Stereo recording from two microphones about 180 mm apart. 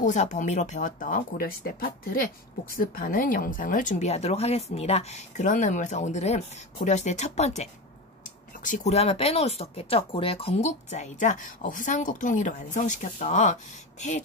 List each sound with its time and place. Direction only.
0.0 s speech: 40° left (ahead or behind)